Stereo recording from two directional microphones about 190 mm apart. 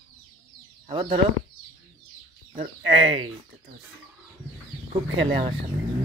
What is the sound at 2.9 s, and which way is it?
Speech, 30° right (ahead or behind).